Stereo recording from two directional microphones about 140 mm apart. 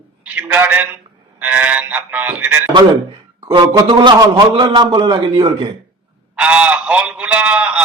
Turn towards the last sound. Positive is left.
turn(degrees=-10)  # may be behind; listen again after turning